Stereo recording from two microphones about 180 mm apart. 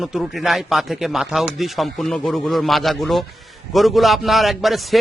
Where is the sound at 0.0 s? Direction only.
Centre (ahead or behind).